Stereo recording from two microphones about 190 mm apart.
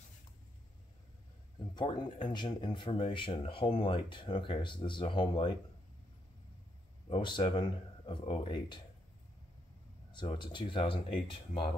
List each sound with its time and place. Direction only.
1.8 s speech: 25° left (ahead or behind)
7.1 s speech: 25° left (ahead or behind)
10.1 s speech: 25° left (ahead or behind)